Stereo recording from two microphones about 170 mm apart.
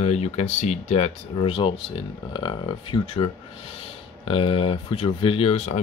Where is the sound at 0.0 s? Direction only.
40° left (ahead or behind).